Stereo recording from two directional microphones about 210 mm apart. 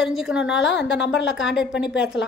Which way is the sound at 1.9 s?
55° left (ahead or behind).